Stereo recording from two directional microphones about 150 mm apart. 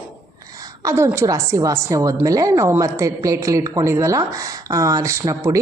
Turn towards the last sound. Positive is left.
turn(degrees=-20)  # may be behind; listen again after turning